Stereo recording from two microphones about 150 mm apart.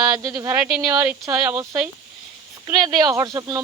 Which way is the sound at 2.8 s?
25° right (ahead or behind).